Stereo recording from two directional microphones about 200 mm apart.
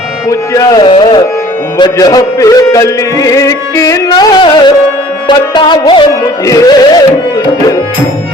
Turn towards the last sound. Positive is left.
turn(degrees=15)  # may be behind; listen again after turning